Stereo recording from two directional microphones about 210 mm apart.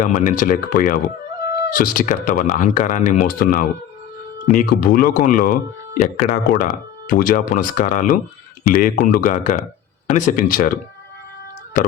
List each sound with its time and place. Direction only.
0.0 s speech: 35° left (ahead or behind)